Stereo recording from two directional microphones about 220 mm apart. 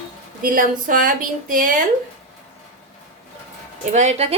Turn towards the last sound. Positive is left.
turn(degrees=-30)  # may be behind; listen again after turning